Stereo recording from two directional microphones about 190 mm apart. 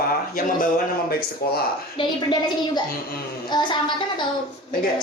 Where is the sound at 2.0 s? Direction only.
25° left (ahead or behind).